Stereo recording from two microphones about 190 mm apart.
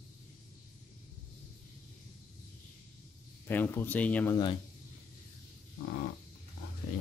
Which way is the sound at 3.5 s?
10° left (ahead or behind).